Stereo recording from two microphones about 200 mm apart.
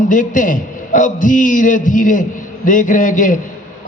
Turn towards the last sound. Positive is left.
turn(degrees=40)  # may be behind; listen again after turning